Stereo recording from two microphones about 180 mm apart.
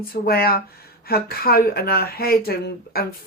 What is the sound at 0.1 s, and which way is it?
Speech, 55° left (ahead or behind).